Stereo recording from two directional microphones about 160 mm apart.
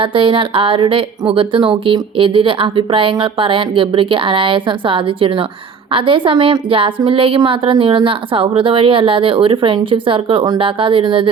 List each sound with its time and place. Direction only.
0.0 s a woman's voice: 35° right (ahead or behind)